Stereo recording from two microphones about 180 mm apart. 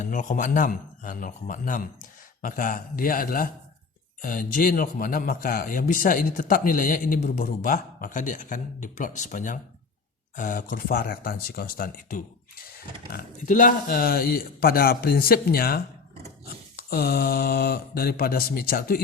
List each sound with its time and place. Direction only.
0.0 s speech: 40° left (ahead or behind)